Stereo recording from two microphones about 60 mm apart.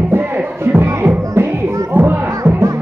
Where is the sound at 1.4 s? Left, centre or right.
Right.